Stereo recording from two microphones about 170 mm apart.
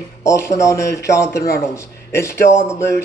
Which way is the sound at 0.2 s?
15° left (ahead or behind).